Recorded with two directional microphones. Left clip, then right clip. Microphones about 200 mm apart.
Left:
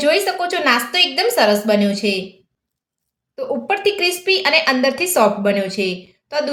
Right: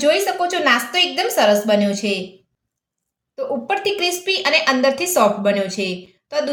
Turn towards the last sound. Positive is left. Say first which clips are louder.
# left 1 dB
turn(degrees=5)  # may be behind; listen again after turning